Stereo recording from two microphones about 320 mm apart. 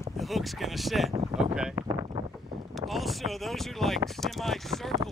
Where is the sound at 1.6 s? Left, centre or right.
Centre.